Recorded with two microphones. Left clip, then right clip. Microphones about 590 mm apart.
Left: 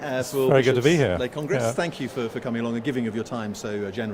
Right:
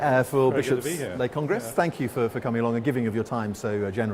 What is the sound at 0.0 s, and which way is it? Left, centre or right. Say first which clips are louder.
Speech: right 4 dB; right.